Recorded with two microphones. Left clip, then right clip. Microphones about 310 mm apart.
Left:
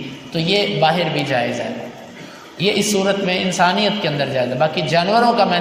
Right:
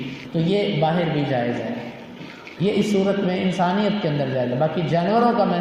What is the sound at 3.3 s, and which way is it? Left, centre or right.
Speech, left.